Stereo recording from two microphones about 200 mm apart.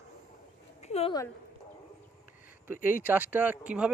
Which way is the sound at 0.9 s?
30° left (ahead or behind).